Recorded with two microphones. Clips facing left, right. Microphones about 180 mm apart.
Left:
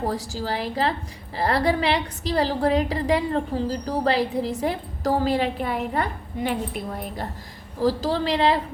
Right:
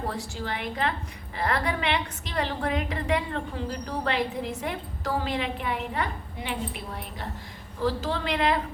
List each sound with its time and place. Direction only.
0.0 s a woman's voice: 40° left (ahead or behind)